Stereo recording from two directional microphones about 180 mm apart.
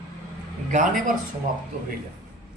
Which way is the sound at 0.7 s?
45° right (ahead or behind).